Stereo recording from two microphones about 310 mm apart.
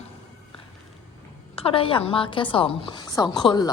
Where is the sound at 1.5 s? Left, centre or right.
Centre.